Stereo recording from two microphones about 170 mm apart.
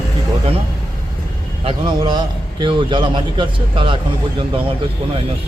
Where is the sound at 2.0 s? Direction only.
25° right (ahead or behind).